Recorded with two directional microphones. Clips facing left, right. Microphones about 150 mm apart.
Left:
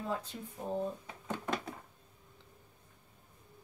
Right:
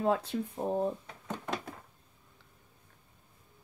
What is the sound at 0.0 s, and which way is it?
Speech, 70° right (ahead or behind).